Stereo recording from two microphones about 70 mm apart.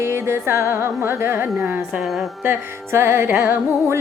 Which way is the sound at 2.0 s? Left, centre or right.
Centre.